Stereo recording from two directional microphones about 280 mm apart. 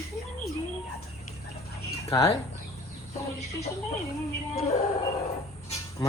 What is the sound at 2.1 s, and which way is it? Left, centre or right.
Speech, centre.